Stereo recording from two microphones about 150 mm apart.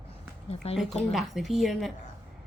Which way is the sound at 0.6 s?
40° left (ahead or behind).